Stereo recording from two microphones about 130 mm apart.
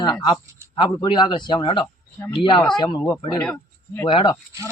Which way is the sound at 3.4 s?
10° left (ahead or behind).